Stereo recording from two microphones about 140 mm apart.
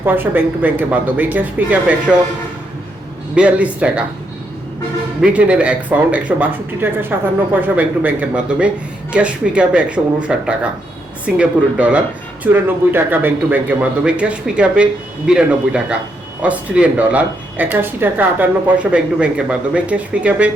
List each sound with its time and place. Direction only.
0.0 s speech: 15° right (ahead or behind)
3.3 s speech: 10° right (ahead or behind)
5.2 s speech: 10° right (ahead or behind)